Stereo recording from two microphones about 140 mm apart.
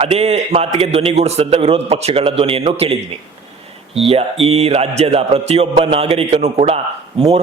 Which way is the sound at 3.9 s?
45° right (ahead or behind).